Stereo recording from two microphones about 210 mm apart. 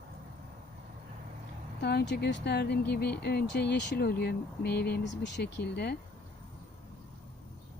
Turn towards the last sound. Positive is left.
turn(degrees=50)  # may be behind; listen again after turning